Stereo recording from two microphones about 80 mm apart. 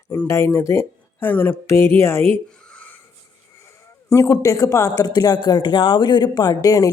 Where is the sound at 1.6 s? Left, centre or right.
Left.